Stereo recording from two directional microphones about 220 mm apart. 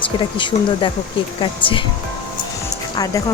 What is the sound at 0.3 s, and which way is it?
Speech, 20° left (ahead or behind).